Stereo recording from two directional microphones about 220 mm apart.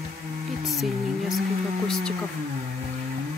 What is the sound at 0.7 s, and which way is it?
Speech, centre (ahead or behind).